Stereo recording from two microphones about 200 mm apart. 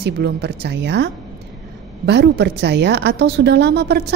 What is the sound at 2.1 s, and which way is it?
A woman's voice, 55° right (ahead or behind).